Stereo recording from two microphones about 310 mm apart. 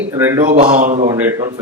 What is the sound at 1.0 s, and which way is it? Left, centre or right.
Speech, centre.